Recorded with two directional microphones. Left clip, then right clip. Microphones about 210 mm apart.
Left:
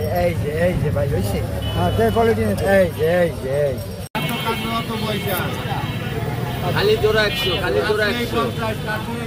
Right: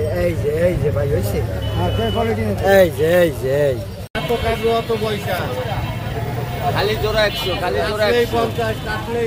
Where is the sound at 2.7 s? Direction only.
45° right (ahead or behind).